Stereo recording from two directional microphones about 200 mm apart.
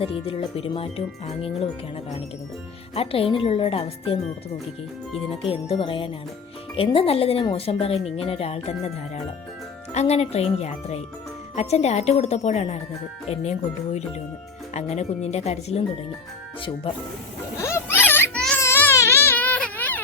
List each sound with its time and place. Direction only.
0.0 s speech: 30° left (ahead or behind)
2.9 s speech: 30° left (ahead or behind)
5.4 s speech: 30° left (ahead or behind)
9.9 s speech: 30° left (ahead or behind)
17.6 s baby cry: 15° left (ahead or behind)